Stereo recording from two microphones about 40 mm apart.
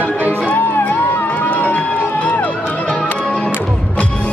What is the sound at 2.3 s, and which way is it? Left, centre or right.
Music, left.